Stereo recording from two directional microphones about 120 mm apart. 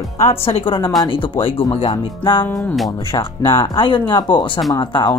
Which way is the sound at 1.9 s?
40° left (ahead or behind).